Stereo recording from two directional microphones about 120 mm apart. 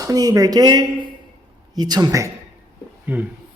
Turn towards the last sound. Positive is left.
turn(degrees=-15)  # may be behind; listen again after turning